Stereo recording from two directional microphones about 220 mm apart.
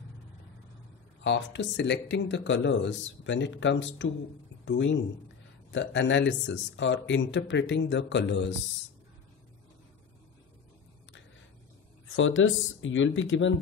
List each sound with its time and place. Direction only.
1.2 s speech: 55° left (ahead or behind)
12.2 s speech: 60° left (ahead or behind)